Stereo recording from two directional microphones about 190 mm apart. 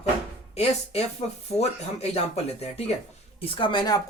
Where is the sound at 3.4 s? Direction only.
25° left (ahead or behind).